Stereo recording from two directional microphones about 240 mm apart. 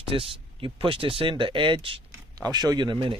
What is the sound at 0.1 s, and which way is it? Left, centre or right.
Speech, right.